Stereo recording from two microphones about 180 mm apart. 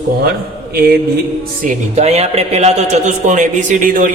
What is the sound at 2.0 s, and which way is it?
A man's voice, 35° right (ahead or behind).